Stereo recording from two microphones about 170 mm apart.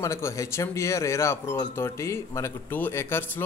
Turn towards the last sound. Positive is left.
turn(degrees=15)  # may be behind; listen again after turning